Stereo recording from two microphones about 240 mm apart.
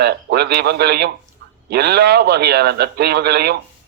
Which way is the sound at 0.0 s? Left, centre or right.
Right.